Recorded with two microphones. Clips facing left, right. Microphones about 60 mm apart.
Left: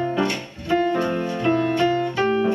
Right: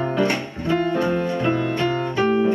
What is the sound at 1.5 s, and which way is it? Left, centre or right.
Music, centre.